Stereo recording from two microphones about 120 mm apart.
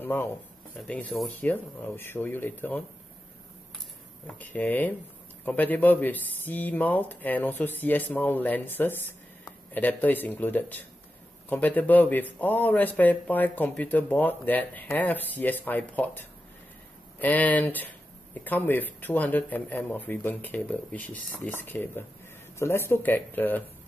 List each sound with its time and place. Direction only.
0.0 s a man's voice: 20° left (ahead or behind)
4.4 s a man's voice: 15° left (ahead or behind)